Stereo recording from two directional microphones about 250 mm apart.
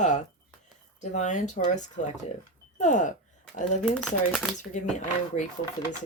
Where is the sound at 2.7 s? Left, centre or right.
Left.